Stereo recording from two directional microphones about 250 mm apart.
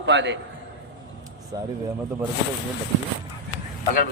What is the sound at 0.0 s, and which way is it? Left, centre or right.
Speech, right.